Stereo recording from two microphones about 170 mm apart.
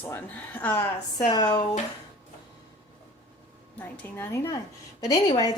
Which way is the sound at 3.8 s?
10° left (ahead or behind).